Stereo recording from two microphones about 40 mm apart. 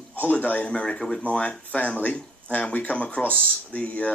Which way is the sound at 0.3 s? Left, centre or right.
Left.